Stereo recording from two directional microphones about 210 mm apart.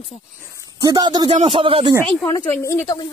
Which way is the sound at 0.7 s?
20° right (ahead or behind).